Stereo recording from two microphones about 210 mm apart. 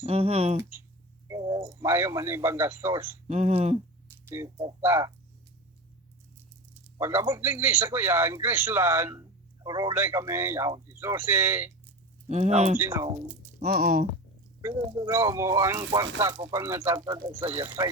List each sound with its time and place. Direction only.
0.0 s speech: 30° right (ahead or behind)
1.3 s a sound: 25° right (ahead or behind)
1.8 s a man's voice: 10° right (ahead or behind)
3.2 s speech: 30° right (ahead or behind)
4.3 s a man's voice: 15° right (ahead or behind)
7.0 s a man's voice: 10° right (ahead or behind)
12.3 s speech: 30° right (ahead or behind)
12.7 s a man's voice: 10° right (ahead or behind)
13.7 s speech: 45° right (ahead or behind)
14.6 s a man's voice: 15° right (ahead or behind)
17.2 s speech: 30° right (ahead or behind)
17.6 s a man's voice: 15° right (ahead or behind)